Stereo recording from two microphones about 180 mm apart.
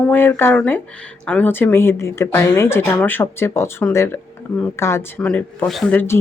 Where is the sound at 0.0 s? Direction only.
10° left (ahead or behind).